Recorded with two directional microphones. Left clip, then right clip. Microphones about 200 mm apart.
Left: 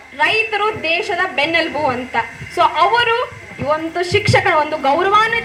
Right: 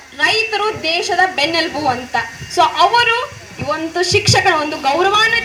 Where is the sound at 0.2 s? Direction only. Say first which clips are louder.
Even; 35° right (ahead or behind).